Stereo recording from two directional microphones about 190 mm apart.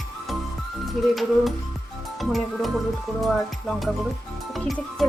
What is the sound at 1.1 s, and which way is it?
Speech, centre (ahead or behind).